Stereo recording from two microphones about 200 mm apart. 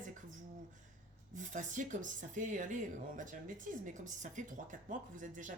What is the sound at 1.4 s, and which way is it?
Speech, 40° right (ahead or behind).